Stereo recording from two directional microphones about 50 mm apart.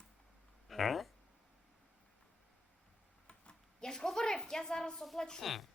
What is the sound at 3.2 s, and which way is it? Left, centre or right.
A child's voice, centre.